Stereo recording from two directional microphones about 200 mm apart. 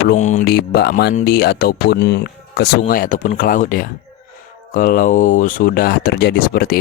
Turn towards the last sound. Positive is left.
turn(degrees=50)  # may be behind; listen again after turning